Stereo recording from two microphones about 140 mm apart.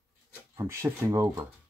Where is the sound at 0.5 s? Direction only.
20° right (ahead or behind).